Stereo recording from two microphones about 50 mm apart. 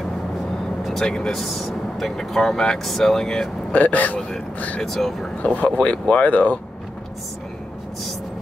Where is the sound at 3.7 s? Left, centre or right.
Left.